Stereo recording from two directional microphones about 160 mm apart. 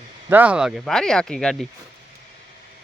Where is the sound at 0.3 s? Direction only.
10° right (ahead or behind).